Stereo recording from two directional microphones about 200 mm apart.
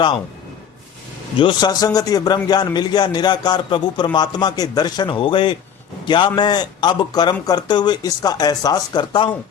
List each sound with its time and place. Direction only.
1.4 s a man's voice: 25° left (ahead or behind)